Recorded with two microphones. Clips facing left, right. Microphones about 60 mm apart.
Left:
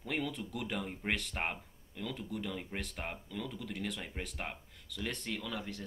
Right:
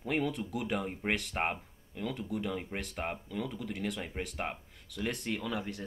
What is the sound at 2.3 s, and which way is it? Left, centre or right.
Speech, centre.